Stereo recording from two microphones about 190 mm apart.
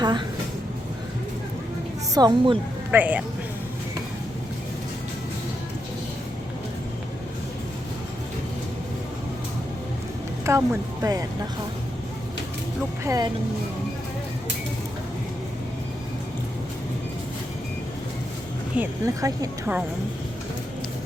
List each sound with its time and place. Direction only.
0.0 s speech: 25° right (ahead or behind)
2.1 s a woman's voice: 25° right (ahead or behind)
2.9 s speech: 10° right (ahead or behind)
10.4 s speech: 15° right (ahead or behind)
13.1 s a woman's voice: 20° right (ahead or behind)
18.8 s speech: 15° right (ahead or behind)